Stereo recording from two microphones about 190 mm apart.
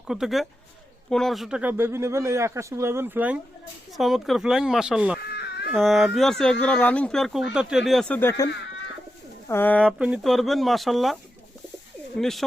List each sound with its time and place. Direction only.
0.1 s speech: centre (ahead or behind)
5.3 s a sound: 60° left (ahead or behind)
5.7 s speech: centre (ahead or behind)
9.5 s speech: 10° left (ahead or behind)
10.0 s speech: centre (ahead or behind)